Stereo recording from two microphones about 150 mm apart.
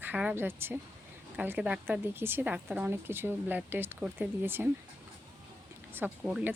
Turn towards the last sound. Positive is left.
turn(degrees=-10)  # may be behind; listen again after turning